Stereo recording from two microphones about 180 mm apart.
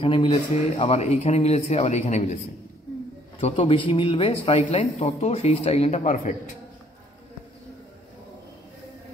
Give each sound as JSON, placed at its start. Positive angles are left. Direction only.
{"t": 0.0, "sound": "speech", "side_deg": 30}
{"t": 3.3, "sound": "speech", "side_deg": 30}